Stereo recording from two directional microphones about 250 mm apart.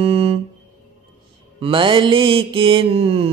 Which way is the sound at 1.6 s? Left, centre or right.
Centre.